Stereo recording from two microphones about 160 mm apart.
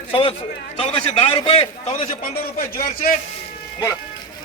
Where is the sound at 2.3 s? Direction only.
65° left (ahead or behind).